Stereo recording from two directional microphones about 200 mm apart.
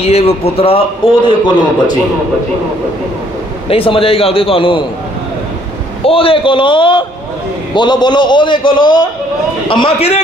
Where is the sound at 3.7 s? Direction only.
25° left (ahead or behind).